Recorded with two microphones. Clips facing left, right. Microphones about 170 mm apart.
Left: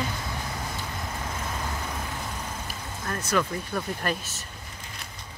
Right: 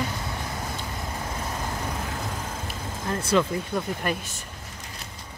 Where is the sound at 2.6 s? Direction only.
25° right (ahead or behind).